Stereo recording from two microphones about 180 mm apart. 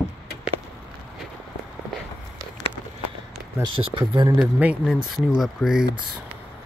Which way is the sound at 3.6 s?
30° right (ahead or behind).